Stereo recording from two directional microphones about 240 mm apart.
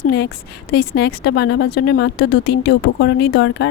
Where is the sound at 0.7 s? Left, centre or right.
Left.